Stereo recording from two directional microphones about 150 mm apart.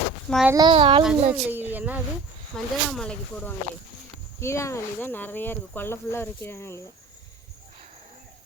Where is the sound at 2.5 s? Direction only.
5° left (ahead or behind).